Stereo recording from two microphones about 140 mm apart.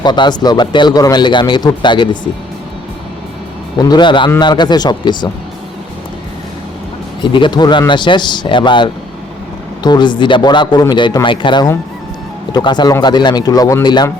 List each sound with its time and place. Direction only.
0.0 s speech: 30° left (ahead or behind)
3.8 s speech: 30° left (ahead or behind)
7.2 s speech: 35° left (ahead or behind)